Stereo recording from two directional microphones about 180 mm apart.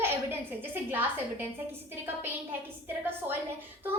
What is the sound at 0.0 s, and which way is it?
A woman's voice, 10° right (ahead or behind).